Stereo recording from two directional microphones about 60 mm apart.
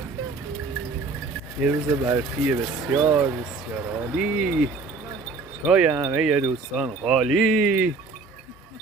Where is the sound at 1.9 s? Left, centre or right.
Right.